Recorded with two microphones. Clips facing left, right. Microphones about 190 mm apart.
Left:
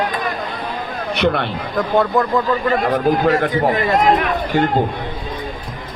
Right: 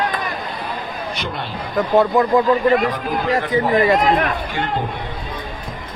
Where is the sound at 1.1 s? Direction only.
65° left (ahead or behind).